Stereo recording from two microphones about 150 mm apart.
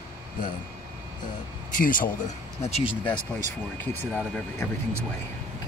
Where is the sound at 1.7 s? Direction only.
65° left (ahead or behind).